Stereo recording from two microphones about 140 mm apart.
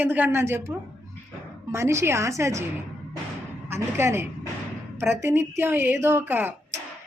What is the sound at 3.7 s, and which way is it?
A woman's voice, 20° right (ahead or behind).